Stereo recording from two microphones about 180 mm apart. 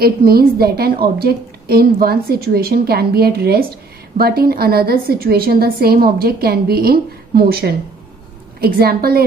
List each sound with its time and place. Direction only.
0.0 s a woman's voice: 55° right (ahead or behind)